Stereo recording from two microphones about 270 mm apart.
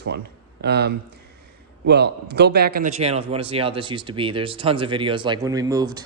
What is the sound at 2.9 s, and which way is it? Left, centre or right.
A man's voice, right.